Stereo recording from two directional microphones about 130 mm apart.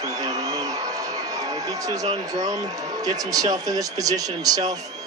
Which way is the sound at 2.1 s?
25° right (ahead or behind).